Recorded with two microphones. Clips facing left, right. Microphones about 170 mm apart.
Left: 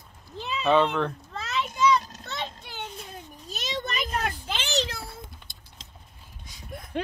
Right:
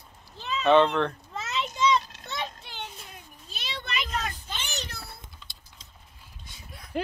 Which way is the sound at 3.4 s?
45° left (ahead or behind).